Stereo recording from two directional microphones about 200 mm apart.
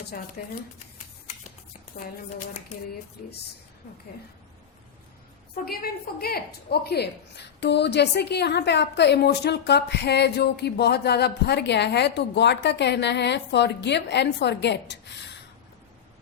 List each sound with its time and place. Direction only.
0.1 s speech: 50° left (ahead or behind)
5.6 s a woman's voice: 50° left (ahead or behind)